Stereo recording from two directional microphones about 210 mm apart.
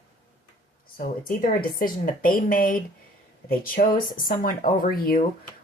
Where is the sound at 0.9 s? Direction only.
40° left (ahead or behind).